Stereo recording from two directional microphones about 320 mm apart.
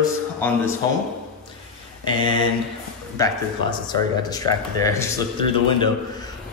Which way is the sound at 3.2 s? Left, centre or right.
Centre.